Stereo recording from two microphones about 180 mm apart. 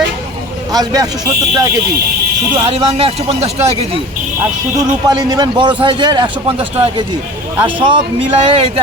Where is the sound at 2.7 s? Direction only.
35° right (ahead or behind).